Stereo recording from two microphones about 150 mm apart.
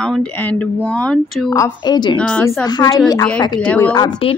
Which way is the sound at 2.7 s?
25° left (ahead or behind).